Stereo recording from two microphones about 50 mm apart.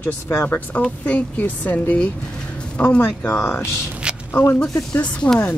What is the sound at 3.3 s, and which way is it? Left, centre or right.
Speech, left.